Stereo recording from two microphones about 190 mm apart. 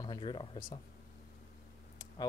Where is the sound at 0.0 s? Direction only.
25° left (ahead or behind).